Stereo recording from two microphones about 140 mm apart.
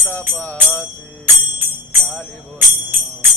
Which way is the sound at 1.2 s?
15° right (ahead or behind).